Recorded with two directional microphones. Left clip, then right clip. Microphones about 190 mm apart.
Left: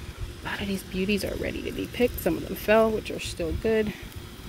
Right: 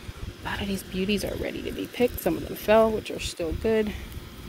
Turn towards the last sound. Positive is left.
turn(degrees=-5)  # may be behind; listen again after turning